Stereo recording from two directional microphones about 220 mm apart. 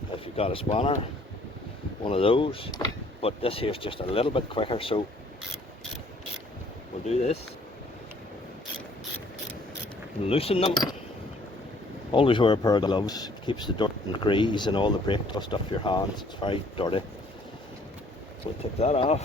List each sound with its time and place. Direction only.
0.1 s speech: 25° left (ahead or behind)
2.0 s speech: 25° left (ahead or behind)
7.0 s speech: 30° left (ahead or behind)
10.2 s speech: 25° left (ahead or behind)
12.1 s speech: 20° left (ahead or behind)
18.6 s speech: 30° left (ahead or behind)